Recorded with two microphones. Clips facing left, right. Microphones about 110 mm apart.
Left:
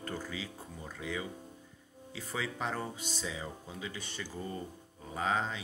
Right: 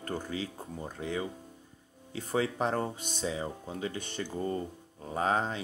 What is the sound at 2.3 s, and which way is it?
Speech, 40° right (ahead or behind).